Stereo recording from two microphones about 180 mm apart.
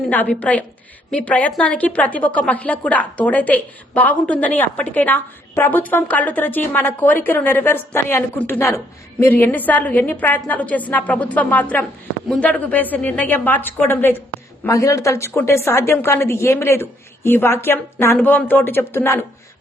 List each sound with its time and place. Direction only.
0.1 s a woman's voice: 10° left (ahead or behind)